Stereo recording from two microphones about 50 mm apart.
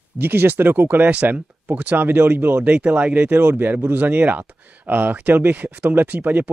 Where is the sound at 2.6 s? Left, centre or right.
Right.